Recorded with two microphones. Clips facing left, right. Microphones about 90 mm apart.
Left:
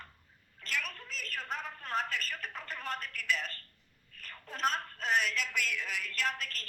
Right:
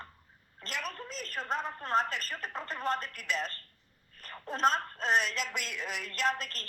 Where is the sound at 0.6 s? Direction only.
25° right (ahead or behind).